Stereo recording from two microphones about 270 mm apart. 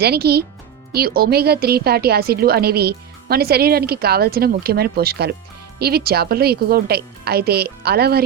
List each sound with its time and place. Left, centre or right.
0.0 s a woman's voice: right